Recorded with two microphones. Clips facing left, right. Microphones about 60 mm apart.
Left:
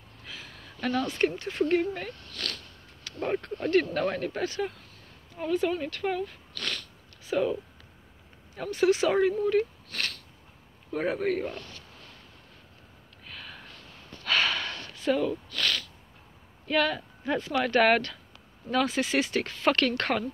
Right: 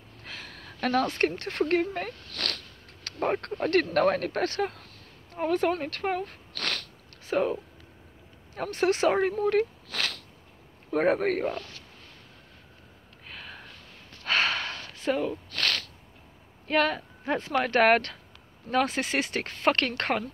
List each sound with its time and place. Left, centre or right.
0.2 s speech: right
6.6 s a sound: right
7.2 s speech: right
8.5 s speech: right
9.4 s sniff: right
10.9 s speech: right
13.3 s sniff: right
14.2 s a sound: right
15.0 s speech: right
15.6 s a sound: right
16.6 s speech: right